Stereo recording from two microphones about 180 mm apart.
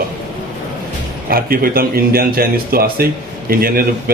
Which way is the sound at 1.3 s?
55° right (ahead or behind).